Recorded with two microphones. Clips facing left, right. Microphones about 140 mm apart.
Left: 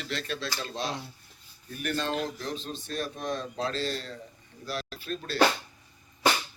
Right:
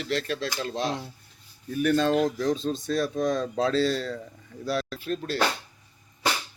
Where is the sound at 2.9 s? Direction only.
90° right.